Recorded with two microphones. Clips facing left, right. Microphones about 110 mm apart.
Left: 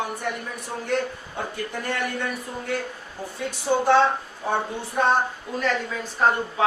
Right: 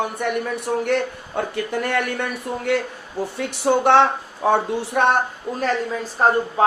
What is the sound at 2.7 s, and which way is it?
Speech, 90° right.